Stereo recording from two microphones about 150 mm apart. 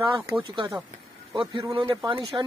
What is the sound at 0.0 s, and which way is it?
Speech, 30° right (ahead or behind).